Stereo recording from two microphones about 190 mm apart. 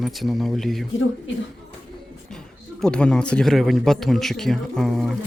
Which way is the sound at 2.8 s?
5° left (ahead or behind).